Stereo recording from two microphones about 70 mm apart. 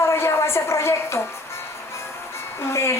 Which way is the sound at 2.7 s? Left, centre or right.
Left.